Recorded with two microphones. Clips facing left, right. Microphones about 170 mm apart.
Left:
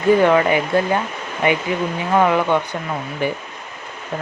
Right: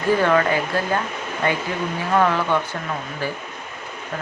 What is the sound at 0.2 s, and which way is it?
Speech, 15° left (ahead or behind).